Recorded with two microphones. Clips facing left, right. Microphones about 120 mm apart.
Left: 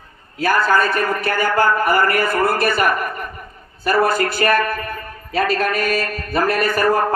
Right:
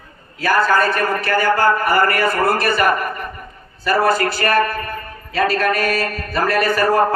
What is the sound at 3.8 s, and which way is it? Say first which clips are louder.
Speech: even; 55° left (ahead or behind).